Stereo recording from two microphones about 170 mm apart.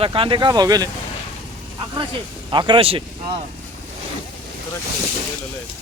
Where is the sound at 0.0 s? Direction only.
30° right (ahead or behind).